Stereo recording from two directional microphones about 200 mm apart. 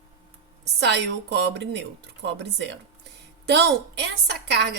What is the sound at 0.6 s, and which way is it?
Speech, 60° right (ahead or behind).